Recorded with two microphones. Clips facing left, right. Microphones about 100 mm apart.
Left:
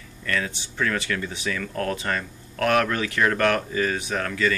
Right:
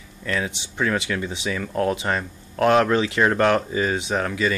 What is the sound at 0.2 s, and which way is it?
Speech, 20° right (ahead or behind).